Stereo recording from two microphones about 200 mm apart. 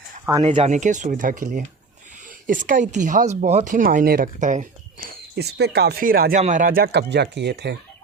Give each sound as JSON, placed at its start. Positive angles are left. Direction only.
{"t": 0.4, "sound": "speech", "side_deg": -30}
{"t": 5.4, "sound": "speech", "side_deg": -55}